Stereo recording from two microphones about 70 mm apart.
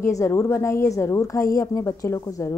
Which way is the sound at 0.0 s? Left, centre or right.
Left.